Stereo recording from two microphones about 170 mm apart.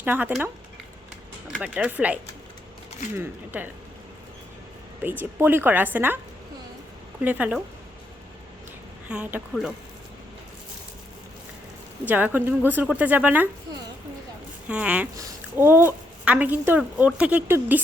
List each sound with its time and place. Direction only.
0.0 s speech: 10° right (ahead or behind)
1.6 s speech: 5° right (ahead or behind)
3.2 s speech: 10° right (ahead or behind)
5.0 s speech: 10° right (ahead or behind)
7.2 s speech: 10° right (ahead or behind)
9.0 s speech: 5° right (ahead or behind)
12.0 s speech: 10° right (ahead or behind)
14.7 s speech: 5° right (ahead or behind)